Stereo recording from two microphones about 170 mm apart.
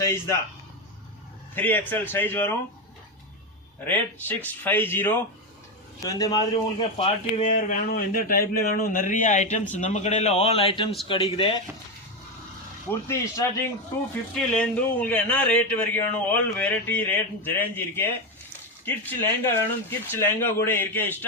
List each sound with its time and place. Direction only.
0.0 s speech: 15° left (ahead or behind)
1.5 s a man's voice: 10° left (ahead or behind)
3.8 s a man's voice: 10° left (ahead or behind)
7.0 s a man's voice: 40° left (ahead or behind)
12.9 s a man's voice: 15° left (ahead or behind)